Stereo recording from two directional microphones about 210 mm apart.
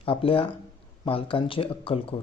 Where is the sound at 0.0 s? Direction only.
25° left (ahead or behind).